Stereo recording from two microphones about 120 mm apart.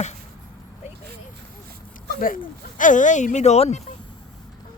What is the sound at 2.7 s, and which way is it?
Speech, 90° left.